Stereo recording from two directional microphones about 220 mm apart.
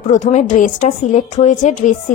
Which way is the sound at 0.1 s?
35° left (ahead or behind).